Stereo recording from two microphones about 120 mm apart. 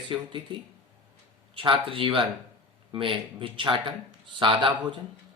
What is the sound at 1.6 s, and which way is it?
Speech, 45° right (ahead or behind).